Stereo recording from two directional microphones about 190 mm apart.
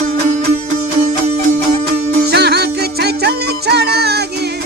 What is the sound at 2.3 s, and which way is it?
Music, 60° right (ahead or behind).